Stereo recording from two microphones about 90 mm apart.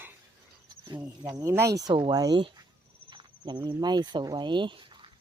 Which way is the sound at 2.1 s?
50° right (ahead or behind).